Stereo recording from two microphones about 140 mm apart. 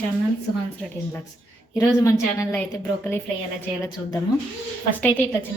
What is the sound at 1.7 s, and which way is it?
A woman's voice, 25° left (ahead or behind).